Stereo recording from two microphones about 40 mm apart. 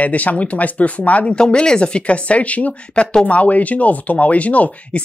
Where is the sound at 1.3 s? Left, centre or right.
Centre.